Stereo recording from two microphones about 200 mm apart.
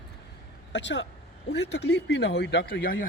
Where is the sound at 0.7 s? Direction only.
60° left (ahead or behind).